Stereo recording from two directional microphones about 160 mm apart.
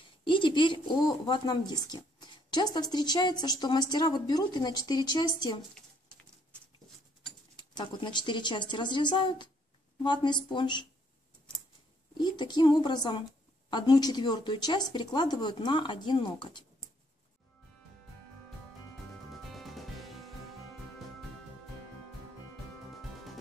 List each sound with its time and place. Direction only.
0.2 s speech: 30° left (ahead or behind)
7.5 s speech: 25° left (ahead or behind)
12.2 s speech: 25° left (ahead or behind)
19.5 s music: centre (ahead or behind)